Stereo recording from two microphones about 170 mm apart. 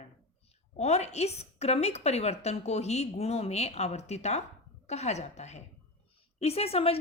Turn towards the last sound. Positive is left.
turn(degrees=35)  # may be behind; listen again after turning